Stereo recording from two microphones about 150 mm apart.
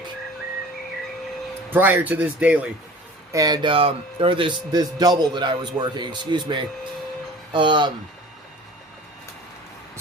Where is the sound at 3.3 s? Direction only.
25° right (ahead or behind).